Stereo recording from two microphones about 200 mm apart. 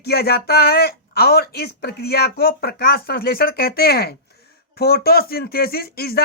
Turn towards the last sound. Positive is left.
turn(degrees=50)  # may be behind; listen again after turning